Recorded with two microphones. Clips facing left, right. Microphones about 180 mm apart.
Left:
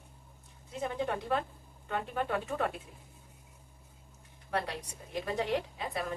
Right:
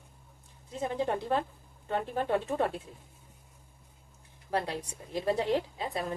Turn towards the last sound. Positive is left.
turn(degrees=-30)  # may be behind; listen again after turning